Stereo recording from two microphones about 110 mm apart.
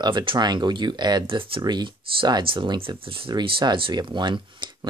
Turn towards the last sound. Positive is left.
turn(degrees=-45)  # may be behind; listen again after turning